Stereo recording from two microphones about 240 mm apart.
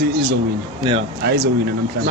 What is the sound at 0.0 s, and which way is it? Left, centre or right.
Speech, right.